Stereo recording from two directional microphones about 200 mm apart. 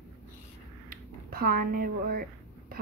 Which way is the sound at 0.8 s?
50° right (ahead or behind).